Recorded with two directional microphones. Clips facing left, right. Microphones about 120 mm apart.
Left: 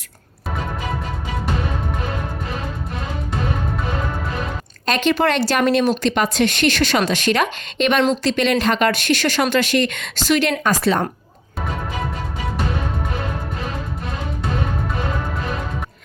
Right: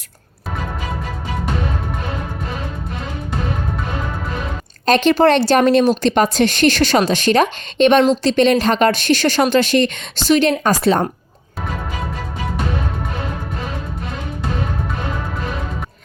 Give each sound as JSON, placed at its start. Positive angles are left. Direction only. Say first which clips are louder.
{"t": 4.9, "sound": "a woman's voice", "louder": "right 5 dB", "side_deg": -35}